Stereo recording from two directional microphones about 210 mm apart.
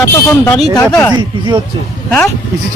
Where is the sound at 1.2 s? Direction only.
20° right (ahead or behind).